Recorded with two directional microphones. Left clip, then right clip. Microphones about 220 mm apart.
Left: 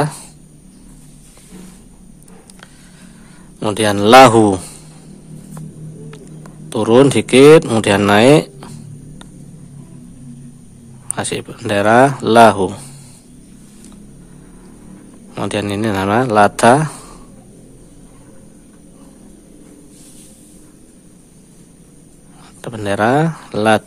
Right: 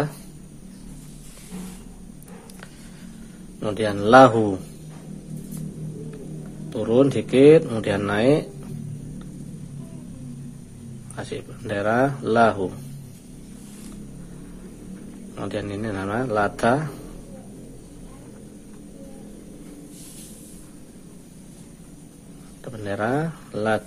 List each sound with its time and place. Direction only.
3.5 s speech: 35° left (ahead or behind)
6.7 s speech: 40° left (ahead or behind)
11.1 s speech: 40° left (ahead or behind)
15.3 s speech: 40° left (ahead or behind)
22.6 s speech: 35° left (ahead or behind)